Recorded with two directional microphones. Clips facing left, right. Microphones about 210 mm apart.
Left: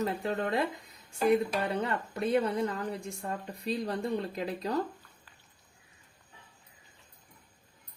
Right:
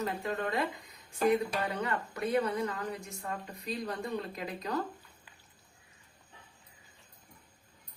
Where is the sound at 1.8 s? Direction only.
25° left (ahead or behind).